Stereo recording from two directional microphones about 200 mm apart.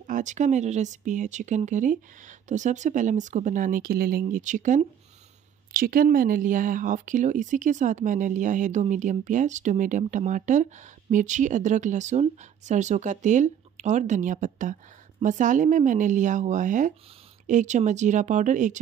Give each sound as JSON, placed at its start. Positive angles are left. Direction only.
{"t": 0.0, "sound": "speech", "side_deg": -40}